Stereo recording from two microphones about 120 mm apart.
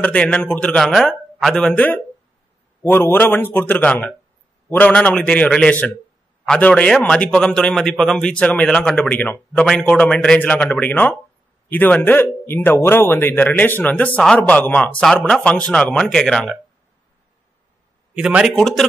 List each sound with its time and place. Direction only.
0.0 s a man's voice: 10° left (ahead or behind)
18.1 s a man's voice: 5° right (ahead or behind)
18.5 s speech: 5° left (ahead or behind)